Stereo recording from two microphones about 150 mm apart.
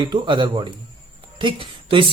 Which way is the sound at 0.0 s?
30° right (ahead or behind).